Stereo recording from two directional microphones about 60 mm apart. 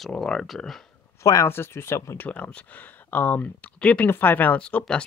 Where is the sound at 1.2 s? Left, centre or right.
Left.